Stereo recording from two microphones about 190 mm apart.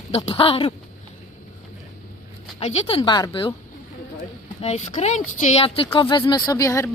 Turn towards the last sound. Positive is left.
turn(degrees=15)  # may be behind; listen again after turning